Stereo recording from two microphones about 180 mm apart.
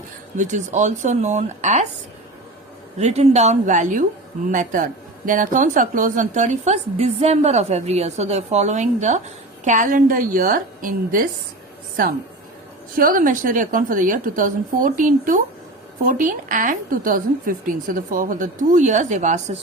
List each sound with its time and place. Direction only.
0.3 s speech: 40° right (ahead or behind)
3.0 s a woman's voice: 35° right (ahead or behind)
13.0 s a woman's voice: 50° right (ahead or behind)